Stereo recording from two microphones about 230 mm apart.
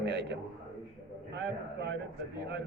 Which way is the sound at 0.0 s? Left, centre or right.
Right.